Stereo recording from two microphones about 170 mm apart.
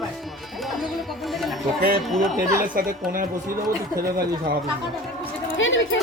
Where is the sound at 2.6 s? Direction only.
55° right (ahead or behind).